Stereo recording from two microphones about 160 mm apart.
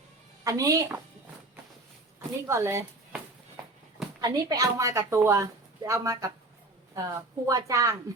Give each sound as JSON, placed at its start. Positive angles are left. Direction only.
{"t": 0.4, "sound": "a woman's voice", "side_deg": -20}
{"t": 2.5, "sound": "speech", "side_deg": -15}
{"t": 4.2, "sound": "a woman's voice", "side_deg": -25}